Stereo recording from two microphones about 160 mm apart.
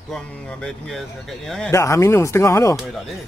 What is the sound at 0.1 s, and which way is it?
Speech, 5° left (ahead or behind).